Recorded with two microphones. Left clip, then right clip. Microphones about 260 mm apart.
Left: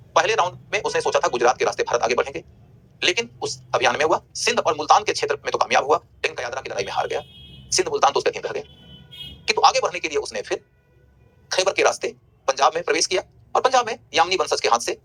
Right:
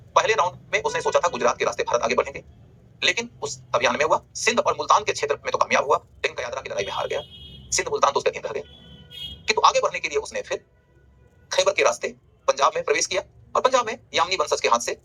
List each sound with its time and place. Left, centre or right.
0.1 s speech: centre